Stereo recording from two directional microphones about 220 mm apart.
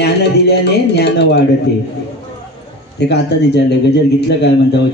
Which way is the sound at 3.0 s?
50° left (ahead or behind).